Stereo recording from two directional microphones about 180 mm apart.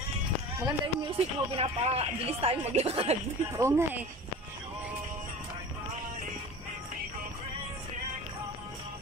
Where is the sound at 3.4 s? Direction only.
15° right (ahead or behind).